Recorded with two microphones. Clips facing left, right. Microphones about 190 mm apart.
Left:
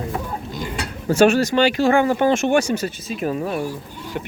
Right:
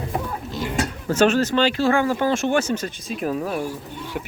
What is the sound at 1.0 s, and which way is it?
Speech, 10° left (ahead or behind).